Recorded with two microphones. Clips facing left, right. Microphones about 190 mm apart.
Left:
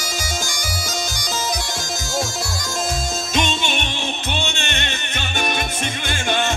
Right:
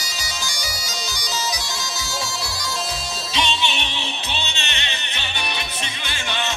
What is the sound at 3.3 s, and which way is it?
Music, 50° left (ahead or behind).